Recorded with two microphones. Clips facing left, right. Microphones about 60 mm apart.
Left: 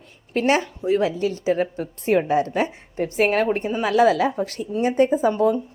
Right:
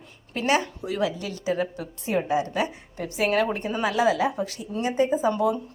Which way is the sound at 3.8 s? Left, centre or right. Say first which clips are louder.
Left 5 dB; left.